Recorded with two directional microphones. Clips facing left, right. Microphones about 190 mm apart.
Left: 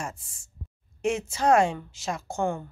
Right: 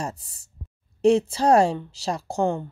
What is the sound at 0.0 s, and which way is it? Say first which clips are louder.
A woman's voice: right 5 dB; 35° right (ahead or behind).